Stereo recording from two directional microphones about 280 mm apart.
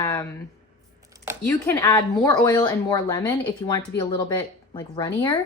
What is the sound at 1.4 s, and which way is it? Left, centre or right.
Speech, centre.